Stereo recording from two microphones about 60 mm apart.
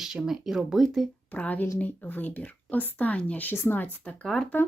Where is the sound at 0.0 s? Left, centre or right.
Centre.